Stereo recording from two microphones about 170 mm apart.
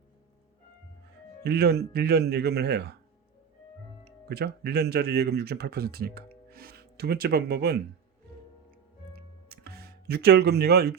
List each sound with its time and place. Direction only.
1.5 s speech: 70° right (ahead or behind)
4.0 s speech: 70° right (ahead or behind)
9.5 s music: 65° right (ahead or behind)